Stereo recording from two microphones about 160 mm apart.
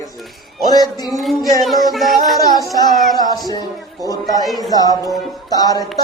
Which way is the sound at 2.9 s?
Centre (ahead or behind).